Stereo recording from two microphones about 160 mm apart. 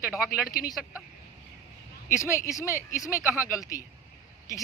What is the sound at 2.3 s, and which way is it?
Speech, 20° left (ahead or behind).